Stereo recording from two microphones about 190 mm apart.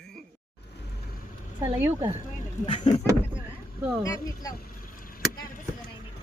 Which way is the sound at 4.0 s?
15° left (ahead or behind).